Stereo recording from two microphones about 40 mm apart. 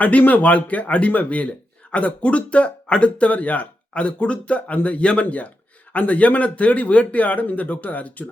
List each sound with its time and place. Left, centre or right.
0.0 s speech: left